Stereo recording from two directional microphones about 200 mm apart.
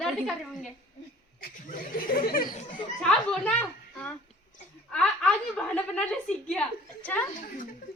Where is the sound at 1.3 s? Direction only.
50° left (ahead or behind).